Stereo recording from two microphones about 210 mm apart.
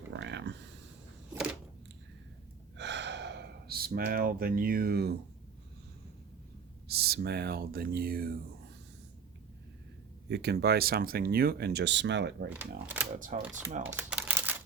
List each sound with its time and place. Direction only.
0.1 s a sound: 55° right (ahead or behind)
2.7 s gasp: 55° right (ahead or behind)
6.8 s speech: 50° right (ahead or behind)
10.2 s speech: 50° right (ahead or behind)
12.5 s speech: 10° right (ahead or behind)
13.1 s speech: 40° right (ahead or behind)
13.8 s a sound: 10° right (ahead or behind)